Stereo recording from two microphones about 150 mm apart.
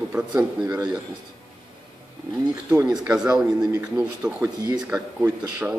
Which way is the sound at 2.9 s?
5° right (ahead or behind).